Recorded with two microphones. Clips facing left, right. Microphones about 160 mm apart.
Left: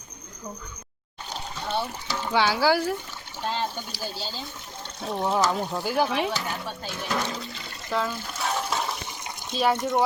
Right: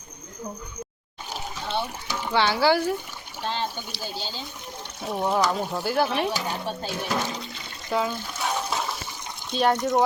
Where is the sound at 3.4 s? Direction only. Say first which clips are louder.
Even; 5° left (ahead or behind).